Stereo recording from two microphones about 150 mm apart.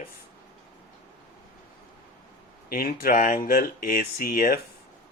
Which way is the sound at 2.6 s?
80° left.